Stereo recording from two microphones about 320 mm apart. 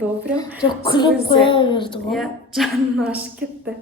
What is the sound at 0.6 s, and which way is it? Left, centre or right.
A woman's voice, centre.